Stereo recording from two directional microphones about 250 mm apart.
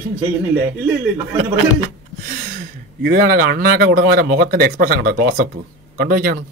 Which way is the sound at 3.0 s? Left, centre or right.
Right.